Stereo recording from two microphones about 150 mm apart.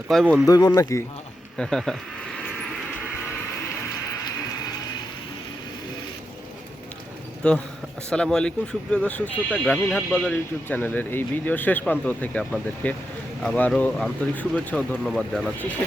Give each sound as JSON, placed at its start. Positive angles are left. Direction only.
{"t": 0.1, "sound": "speech", "side_deg": 5}
{"t": 0.4, "sound": "speech", "side_deg": 25}
{"t": 1.5, "sound": "a sound", "side_deg": 5}
{"t": 7.4, "sound": "speech", "side_deg": 5}